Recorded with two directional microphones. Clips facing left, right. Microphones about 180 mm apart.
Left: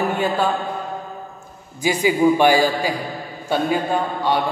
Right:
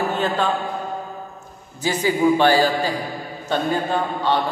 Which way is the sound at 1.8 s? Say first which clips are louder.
Left 2 dB; 15° left (ahead or behind).